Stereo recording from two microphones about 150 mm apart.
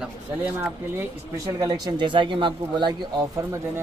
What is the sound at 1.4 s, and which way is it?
Speech, 25° right (ahead or behind).